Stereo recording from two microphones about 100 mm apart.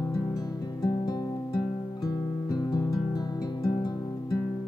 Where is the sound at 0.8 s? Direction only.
35° left (ahead or behind).